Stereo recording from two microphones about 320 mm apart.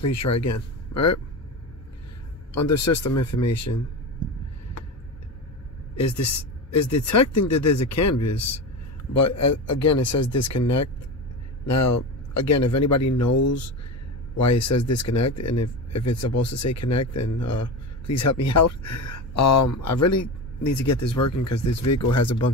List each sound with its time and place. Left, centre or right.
0.0 s speech: left
2.7 s speech: left
6.8 s speech: left